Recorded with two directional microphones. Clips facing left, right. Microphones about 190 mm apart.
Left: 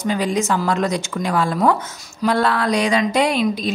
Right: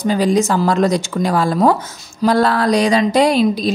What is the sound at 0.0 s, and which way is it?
Speech, 35° right (ahead or behind).